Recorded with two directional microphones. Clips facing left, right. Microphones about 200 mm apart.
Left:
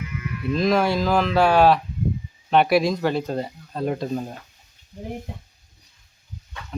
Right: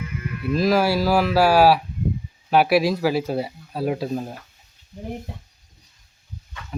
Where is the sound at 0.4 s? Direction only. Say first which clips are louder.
Right 1 dB; 5° right (ahead or behind).